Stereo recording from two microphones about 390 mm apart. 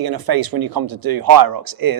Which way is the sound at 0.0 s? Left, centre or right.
Right.